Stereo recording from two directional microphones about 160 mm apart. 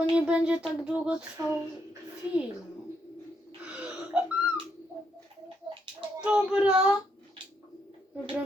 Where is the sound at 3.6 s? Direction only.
5° right (ahead or behind).